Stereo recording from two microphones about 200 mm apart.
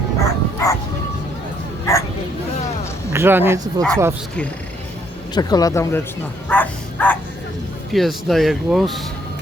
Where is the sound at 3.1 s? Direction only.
10° right (ahead or behind).